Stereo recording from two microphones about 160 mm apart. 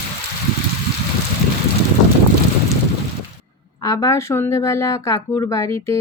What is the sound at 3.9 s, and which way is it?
Speech, 20° left (ahead or behind).